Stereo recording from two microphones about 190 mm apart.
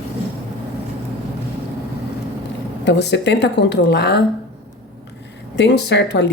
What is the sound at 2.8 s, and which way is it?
Speech, 65° left (ahead or behind).